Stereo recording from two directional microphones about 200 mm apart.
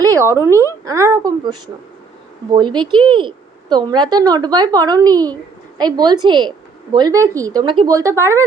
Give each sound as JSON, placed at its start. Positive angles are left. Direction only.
{"t": 0.0, "sound": "speech", "side_deg": -15}